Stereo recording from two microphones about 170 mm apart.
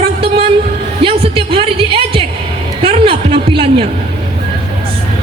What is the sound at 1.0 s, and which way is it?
Music, 35° right (ahead or behind).